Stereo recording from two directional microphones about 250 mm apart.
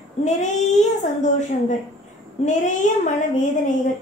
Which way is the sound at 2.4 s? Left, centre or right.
Left.